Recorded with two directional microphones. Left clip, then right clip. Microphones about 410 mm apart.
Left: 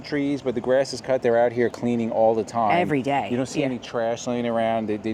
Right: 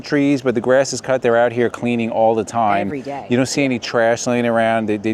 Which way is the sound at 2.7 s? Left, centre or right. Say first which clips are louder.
Even; centre.